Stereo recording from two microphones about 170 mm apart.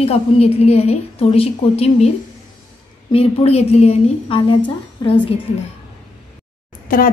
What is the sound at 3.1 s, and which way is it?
A woman's voice, 35° left (ahead or behind).